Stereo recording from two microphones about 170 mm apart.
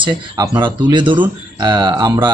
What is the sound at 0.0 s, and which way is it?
Speech, 25° right (ahead or behind).